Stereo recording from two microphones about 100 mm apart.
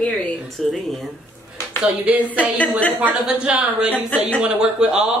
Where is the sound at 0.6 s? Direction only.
5° left (ahead or behind).